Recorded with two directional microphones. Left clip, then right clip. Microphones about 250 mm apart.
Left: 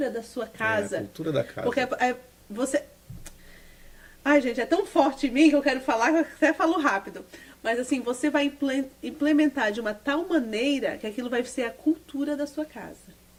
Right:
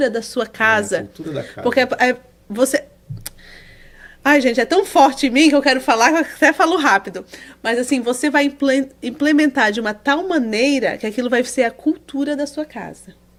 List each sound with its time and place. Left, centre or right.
0.0 s a woman's voice: right
1.1 s speech: centre
1.7 s a woman's voice: right
4.2 s a woman's voice: right